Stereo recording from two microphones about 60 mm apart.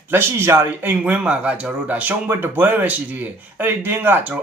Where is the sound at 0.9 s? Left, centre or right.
Right.